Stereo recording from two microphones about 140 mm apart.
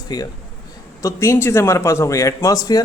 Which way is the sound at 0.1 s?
30° left (ahead or behind).